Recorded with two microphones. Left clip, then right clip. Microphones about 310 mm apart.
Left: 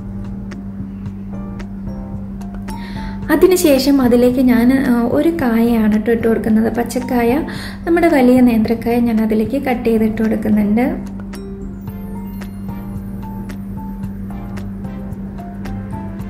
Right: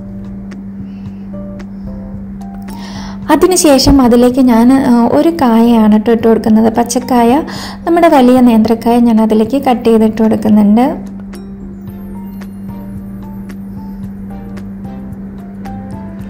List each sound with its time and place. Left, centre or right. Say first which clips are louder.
3.3 s a woman's voice: right 4 dB; centre